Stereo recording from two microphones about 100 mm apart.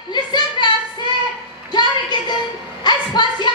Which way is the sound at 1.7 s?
50° left (ahead or behind).